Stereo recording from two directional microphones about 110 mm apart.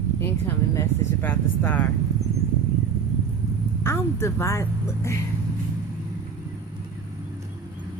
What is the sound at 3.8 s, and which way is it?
A woman's voice, 25° left (ahead or behind).